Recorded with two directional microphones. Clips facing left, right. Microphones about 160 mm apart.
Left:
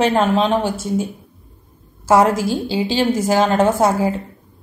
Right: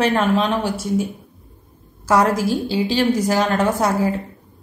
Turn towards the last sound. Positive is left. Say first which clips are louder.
# left 3 dB
turn(degrees=25)  # may be behind; listen again after turning